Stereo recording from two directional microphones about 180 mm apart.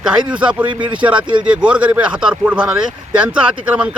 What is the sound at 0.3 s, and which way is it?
Speech, 5° right (ahead or behind).